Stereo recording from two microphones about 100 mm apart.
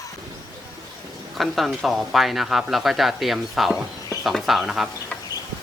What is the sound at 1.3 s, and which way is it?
Speech, centre (ahead or behind).